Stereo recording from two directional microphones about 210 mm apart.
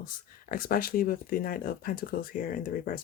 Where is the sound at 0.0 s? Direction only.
45° left (ahead or behind).